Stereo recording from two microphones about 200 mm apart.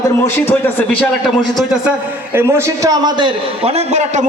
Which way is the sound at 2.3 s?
15° right (ahead or behind).